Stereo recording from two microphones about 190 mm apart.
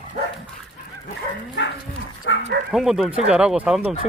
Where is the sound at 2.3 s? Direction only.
80° left.